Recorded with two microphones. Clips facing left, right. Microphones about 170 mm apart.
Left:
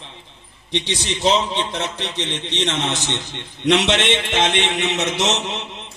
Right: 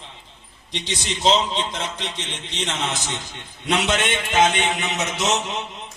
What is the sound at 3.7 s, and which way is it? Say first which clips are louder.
Speech: left 4 dB; 80° left.